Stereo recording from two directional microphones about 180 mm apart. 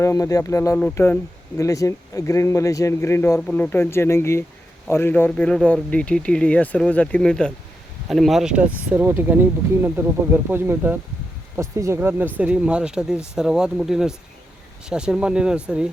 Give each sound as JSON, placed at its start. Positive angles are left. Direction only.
{"t": 0.0, "sound": "speech", "side_deg": 15}